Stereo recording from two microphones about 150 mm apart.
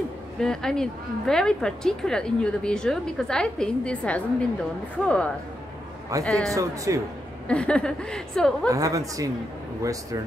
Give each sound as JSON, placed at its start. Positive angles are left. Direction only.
{"t": 0.4, "sound": "a woman's voice", "side_deg": 5}
{"t": 6.5, "sound": "a woman's voice", "side_deg": -20}
{"t": 7.4, "sound": "a woman's voice", "side_deg": 5}
{"t": 8.6, "sound": "a woman's voice", "side_deg": -20}